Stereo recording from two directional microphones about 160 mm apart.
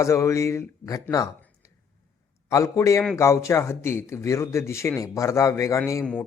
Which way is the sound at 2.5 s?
20° left (ahead or behind).